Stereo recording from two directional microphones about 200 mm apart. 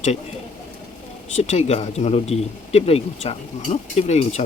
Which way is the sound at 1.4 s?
35° left (ahead or behind).